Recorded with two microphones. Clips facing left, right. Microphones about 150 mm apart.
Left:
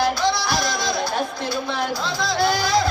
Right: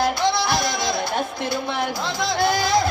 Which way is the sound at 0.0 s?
25° right (ahead or behind).